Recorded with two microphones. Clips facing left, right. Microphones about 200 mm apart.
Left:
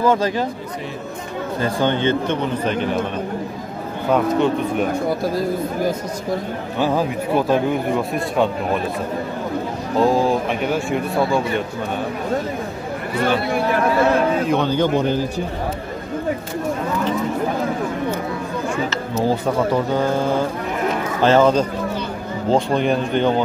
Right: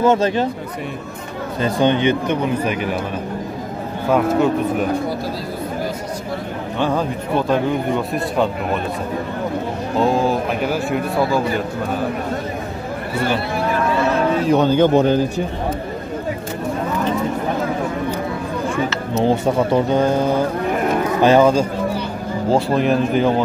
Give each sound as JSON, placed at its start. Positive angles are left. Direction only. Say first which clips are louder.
{"t": 0.0, "sound": "speech", "louder": "right 2 dB", "side_deg": -25}
{"t": 1.6, "sound": "speech", "louder": "right 3 dB", "side_deg": -20}
{"t": 6.8, "sound": "a man's voice", "louder": "left 1 dB", "side_deg": 10}
{"t": 9.9, "sound": "a man's voice", "louder": "left 1 dB", "side_deg": 0}
{"t": 14.5, "sound": "a man's voice", "louder": "right 4 dB", "side_deg": -45}
{"t": 19.2, "sound": "a man's voice", "louder": "right 2 dB", "side_deg": -20}